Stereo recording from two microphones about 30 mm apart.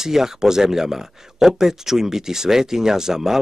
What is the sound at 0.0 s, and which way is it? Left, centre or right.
Speech, centre.